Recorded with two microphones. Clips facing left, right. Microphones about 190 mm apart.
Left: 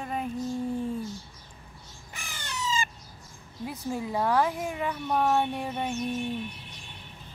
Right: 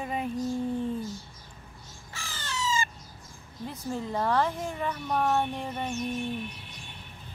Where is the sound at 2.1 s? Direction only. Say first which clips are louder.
Right 2 dB; 15° left (ahead or behind).